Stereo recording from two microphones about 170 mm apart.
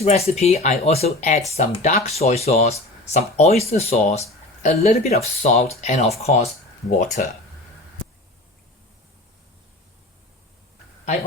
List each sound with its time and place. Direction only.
0.0 s speech: 40° left (ahead or behind)